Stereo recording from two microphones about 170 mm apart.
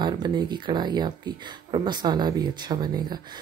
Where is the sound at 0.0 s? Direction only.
25° right (ahead or behind).